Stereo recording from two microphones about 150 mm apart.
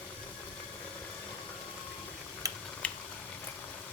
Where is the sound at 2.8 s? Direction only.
10° left (ahead or behind).